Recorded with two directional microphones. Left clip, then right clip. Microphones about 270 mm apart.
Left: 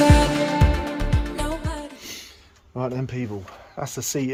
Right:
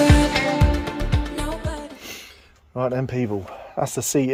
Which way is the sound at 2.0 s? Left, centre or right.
Centre.